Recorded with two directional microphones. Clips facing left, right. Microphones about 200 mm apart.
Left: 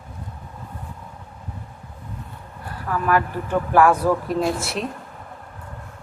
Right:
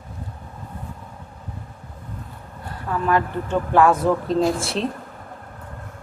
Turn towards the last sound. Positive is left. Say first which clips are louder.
# right 2 dB
turn(degrees=-30)  # may be behind; listen again after turning